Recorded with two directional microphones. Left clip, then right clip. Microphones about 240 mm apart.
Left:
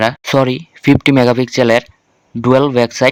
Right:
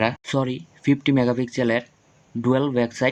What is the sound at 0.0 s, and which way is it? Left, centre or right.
Speech, left.